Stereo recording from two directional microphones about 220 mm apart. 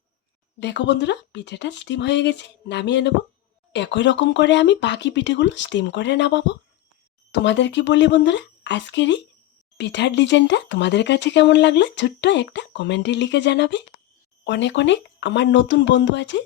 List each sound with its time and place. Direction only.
0.6 s speech: 50° left (ahead or behind)